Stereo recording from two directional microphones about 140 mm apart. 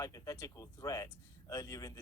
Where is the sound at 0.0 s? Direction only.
25° left (ahead or behind).